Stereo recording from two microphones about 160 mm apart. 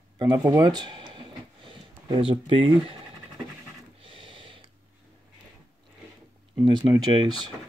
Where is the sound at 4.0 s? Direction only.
30° right (ahead or behind).